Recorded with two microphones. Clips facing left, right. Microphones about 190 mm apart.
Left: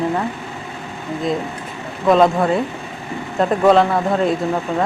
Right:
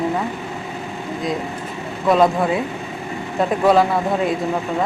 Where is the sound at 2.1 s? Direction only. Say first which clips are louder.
Left 2 dB; 5° right (ahead or behind).